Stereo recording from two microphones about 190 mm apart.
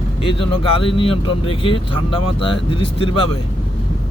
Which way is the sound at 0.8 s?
30° left (ahead or behind).